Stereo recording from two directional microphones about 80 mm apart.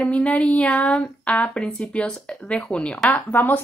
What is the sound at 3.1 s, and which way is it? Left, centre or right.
Speech, left.